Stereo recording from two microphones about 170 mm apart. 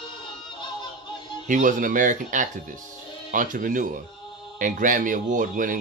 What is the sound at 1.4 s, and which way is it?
Speech, 50° right (ahead or behind).